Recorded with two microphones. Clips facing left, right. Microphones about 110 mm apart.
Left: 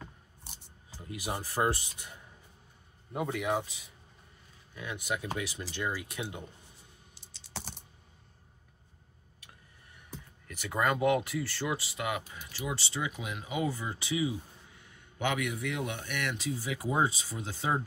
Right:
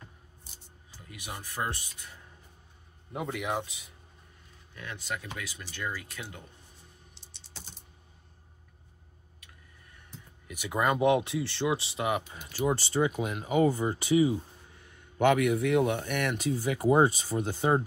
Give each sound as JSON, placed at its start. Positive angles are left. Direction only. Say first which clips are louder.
{"t": 1.0, "sound": "speech", "louder": "left 6 dB", "side_deg": 30}
{"t": 3.1, "sound": "speech", "louder": "left 1 dB", "side_deg": 0}
{"t": 4.7, "sound": "speech", "louder": "left 2 dB", "side_deg": 10}
{"t": 5.3, "sound": "speech", "louder": "left 5 dB", "side_deg": 30}
{"t": 5.9, "sound": "speech", "louder": "left 1 dB", "side_deg": 15}
{"t": 7.5, "sound": "typing", "louder": "left 8 dB", "side_deg": 70}
{"t": 10.5, "sound": "speech", "louder": "right 2 dB", "side_deg": -15}
{"t": 15.1, "sound": "speech", "louder": "right 9 dB", "side_deg": -50}